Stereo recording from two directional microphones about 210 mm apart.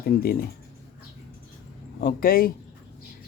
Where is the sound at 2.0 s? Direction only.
45° left (ahead or behind).